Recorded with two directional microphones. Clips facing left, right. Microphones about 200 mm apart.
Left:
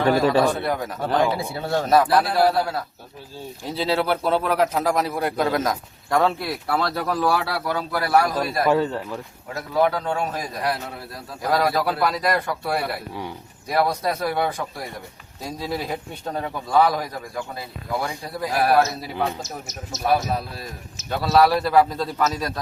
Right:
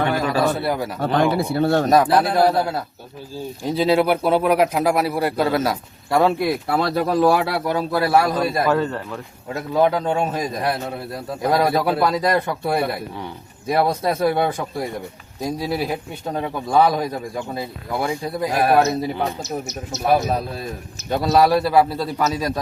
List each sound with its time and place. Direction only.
0.0 s speech: 35° left (ahead or behind)
0.6 s speech: 5° right (ahead or behind)
1.4 s speech: 65° right (ahead or behind)
1.9 s a man's voice: 20° right (ahead or behind)
8.6 s speech: 10° left (ahead or behind)
9.7 s a man's voice: 25° right (ahead or behind)
15.4 s a man's voice: 10° right (ahead or behind)
21.1 s speech: 15° right (ahead or behind)